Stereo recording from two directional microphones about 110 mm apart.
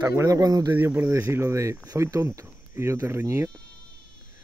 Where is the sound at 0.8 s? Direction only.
15° right (ahead or behind).